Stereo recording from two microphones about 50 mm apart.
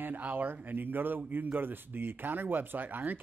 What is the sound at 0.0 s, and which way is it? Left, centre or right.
A man's voice, right.